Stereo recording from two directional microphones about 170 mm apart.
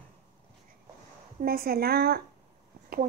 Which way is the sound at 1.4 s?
60° right (ahead or behind).